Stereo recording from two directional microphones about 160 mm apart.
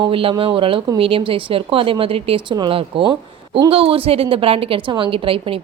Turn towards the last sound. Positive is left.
turn(degrees=-35)  # may be behind; listen again after turning